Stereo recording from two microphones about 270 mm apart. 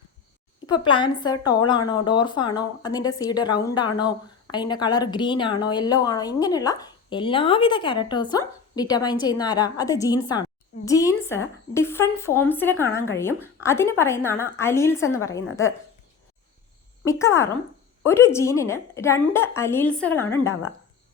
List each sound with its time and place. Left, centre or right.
0.7 s a woman's voice: centre
17.1 s a woman's voice: centre